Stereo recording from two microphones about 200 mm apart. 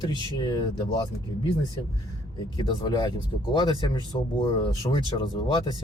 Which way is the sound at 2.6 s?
20° left (ahead or behind).